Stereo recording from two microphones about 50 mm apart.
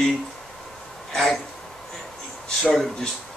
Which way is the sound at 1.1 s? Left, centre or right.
Centre.